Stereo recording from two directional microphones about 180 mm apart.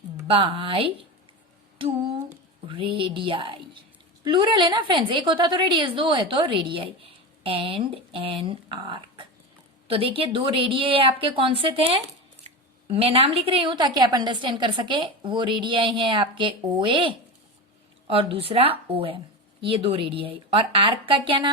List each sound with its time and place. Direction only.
0.3 s a woman's voice: 30° right (ahead or behind)
2.6 s a woman's voice: 30° right (ahead or behind)